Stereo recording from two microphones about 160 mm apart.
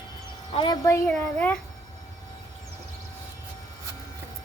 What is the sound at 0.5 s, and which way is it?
Speech, 30° left (ahead or behind).